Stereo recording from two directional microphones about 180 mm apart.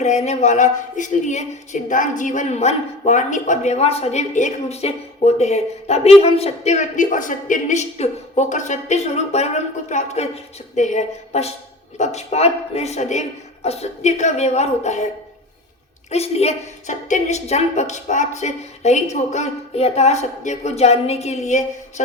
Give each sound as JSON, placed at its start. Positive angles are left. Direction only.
{"t": 0.0, "sound": "speech", "side_deg": 40}
{"t": 16.0, "sound": "speech", "side_deg": 35}